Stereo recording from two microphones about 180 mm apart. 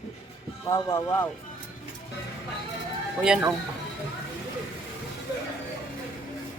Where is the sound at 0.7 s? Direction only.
15° left (ahead or behind).